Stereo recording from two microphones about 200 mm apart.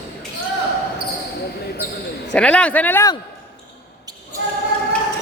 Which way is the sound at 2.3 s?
5° left (ahead or behind).